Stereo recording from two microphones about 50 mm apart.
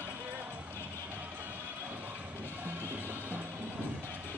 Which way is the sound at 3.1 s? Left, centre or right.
Right.